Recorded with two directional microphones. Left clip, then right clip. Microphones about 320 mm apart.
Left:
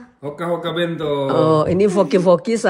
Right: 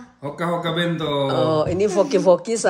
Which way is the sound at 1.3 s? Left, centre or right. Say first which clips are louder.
Left 6 dB; centre.